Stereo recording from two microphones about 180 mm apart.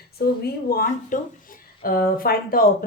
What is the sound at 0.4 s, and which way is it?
Speech, 55° left (ahead or behind).